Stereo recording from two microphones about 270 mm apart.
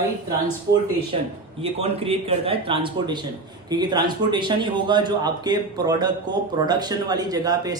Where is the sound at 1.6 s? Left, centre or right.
Right.